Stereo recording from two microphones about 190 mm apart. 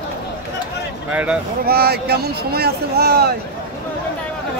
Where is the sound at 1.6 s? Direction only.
55° right (ahead or behind).